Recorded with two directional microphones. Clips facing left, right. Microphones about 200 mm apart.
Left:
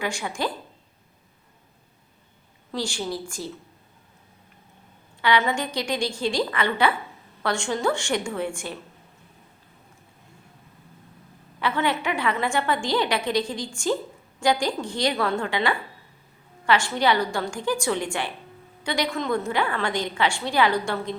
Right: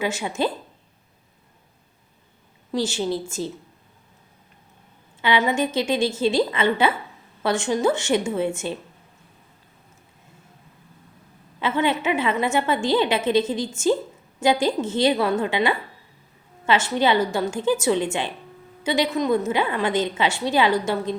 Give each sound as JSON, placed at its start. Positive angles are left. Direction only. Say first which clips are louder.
{"t": 0.0, "sound": "a woman's voice", "louder": "right 4 dB", "side_deg": -20}
{"t": 2.7, "sound": "a woman's voice", "louder": "right 5 dB", "side_deg": -20}
{"t": 5.2, "sound": "a woman's voice", "louder": "right 2 dB", "side_deg": -20}
{"t": 11.6, "sound": "a woman's voice", "louder": "right 3 dB", "side_deg": -20}